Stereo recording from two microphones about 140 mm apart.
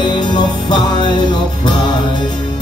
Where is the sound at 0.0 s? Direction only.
35° left (ahead or behind).